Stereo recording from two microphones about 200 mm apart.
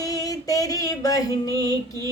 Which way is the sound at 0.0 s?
15° left (ahead or behind).